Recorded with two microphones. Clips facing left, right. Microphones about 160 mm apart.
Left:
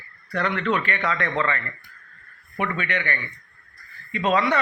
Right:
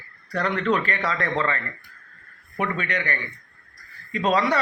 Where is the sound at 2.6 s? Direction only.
35° right (ahead or behind).